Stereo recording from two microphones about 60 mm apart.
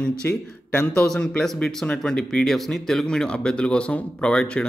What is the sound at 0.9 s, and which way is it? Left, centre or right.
Speech, centre.